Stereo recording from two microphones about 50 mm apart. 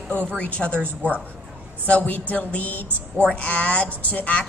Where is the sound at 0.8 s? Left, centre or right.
Right.